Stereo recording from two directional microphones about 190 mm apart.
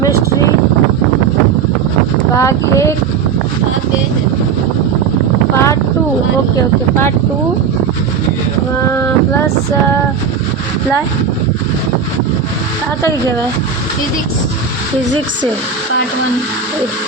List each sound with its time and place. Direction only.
2.4 s speech: 15° left (ahead or behind)